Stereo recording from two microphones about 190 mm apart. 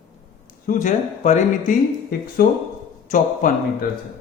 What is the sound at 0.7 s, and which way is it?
A man's voice, 40° left (ahead or behind).